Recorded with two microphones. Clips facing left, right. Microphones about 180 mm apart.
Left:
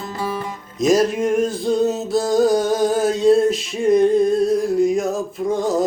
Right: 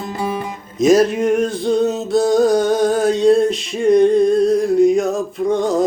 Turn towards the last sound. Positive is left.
turn(degrees=0)  # may be behind; listen again after turning